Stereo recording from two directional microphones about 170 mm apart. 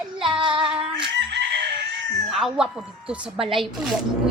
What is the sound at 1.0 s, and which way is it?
Chicken, 90° right.